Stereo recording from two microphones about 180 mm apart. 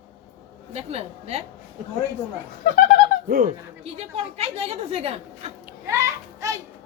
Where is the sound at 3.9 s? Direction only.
35° right (ahead or behind).